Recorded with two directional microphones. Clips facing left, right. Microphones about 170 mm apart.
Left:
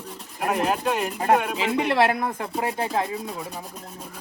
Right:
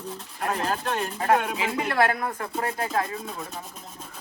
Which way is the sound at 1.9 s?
20° left (ahead or behind).